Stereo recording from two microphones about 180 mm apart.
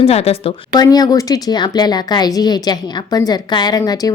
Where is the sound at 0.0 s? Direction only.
35° left (ahead or behind).